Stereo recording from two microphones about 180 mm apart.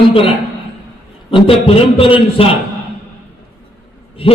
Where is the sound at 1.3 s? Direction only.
30° left (ahead or behind).